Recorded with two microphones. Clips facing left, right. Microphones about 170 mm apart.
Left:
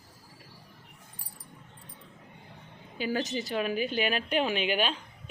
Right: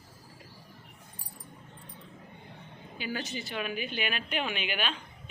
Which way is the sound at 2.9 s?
40° left (ahead or behind).